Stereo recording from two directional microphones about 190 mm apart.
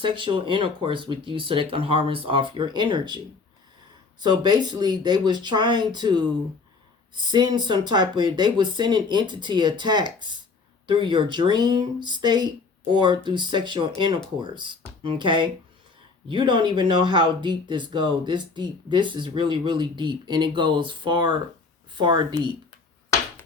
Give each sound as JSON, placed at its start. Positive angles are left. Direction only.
{"t": 0.0, "sound": "speech", "side_deg": -25}
{"t": 4.2, "sound": "speech", "side_deg": -20}
{"t": 7.3, "sound": "speech", "side_deg": -25}